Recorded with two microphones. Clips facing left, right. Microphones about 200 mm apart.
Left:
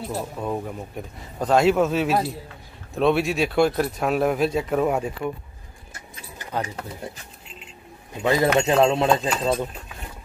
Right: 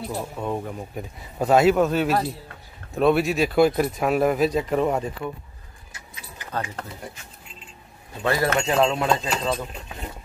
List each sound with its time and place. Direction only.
0.1 s speech: 5° left (ahead or behind)
8.2 s speech: 15° left (ahead or behind)
9.3 s speech: 5° left (ahead or behind)